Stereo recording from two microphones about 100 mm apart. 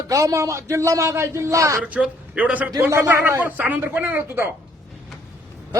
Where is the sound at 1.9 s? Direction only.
15° right (ahead or behind).